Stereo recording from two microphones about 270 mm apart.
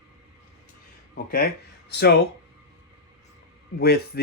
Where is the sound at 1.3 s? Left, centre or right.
Left.